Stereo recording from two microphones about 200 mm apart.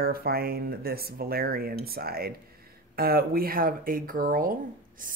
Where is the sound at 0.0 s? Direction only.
50° right (ahead or behind).